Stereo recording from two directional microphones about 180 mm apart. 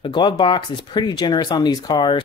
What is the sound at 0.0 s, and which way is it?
Speech, 25° left (ahead or behind).